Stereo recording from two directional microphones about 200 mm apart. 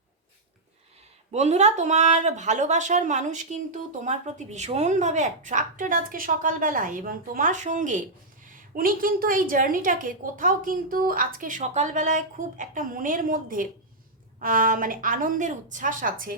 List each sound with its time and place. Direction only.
1.3 s a woman's voice: 35° right (ahead or behind)